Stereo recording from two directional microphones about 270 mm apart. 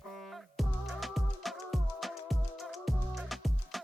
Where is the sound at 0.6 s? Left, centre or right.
Centre.